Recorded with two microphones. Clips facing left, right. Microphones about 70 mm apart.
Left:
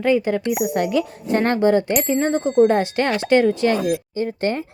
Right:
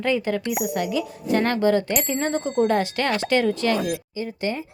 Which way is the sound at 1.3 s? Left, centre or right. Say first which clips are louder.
Left 3 dB; left.